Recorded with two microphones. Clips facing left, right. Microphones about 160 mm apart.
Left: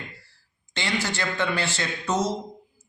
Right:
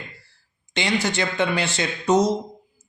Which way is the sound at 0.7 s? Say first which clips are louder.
Right 5 dB; 20° right (ahead or behind).